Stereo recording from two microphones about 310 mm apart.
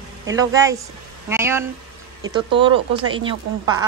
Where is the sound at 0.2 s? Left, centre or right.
Centre.